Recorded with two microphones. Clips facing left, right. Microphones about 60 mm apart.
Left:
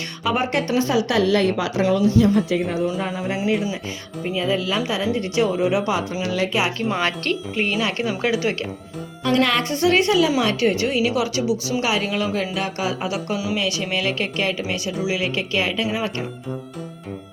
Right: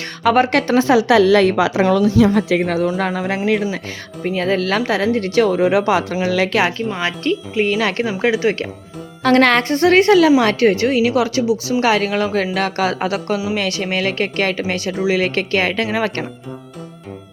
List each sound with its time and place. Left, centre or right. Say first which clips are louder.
0.3 s speech: right 7 dB; right
4.2 s speech: right 4 dB; right
7.7 s speech: right 4 dB; right
9.4 s a woman's voice: right 4 dB; right
11.8 s speech: right 6 dB; right
12.5 s speech: right 6 dB; right
13.6 s speech: right 3 dB; right